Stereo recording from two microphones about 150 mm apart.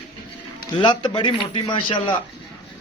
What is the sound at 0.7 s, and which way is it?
A man's voice, 30° left (ahead or behind).